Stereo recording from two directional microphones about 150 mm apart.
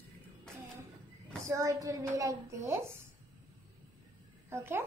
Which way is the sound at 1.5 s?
20° right (ahead or behind).